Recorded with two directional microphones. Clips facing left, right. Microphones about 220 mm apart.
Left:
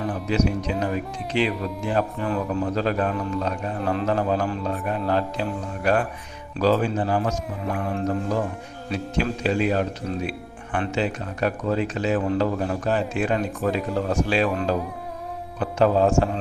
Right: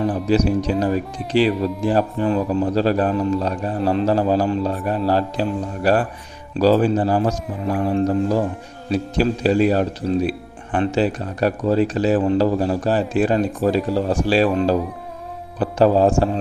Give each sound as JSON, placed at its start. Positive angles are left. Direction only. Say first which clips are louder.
{"t": 0.3, "sound": "speech", "louder": "right 4 dB", "side_deg": -35}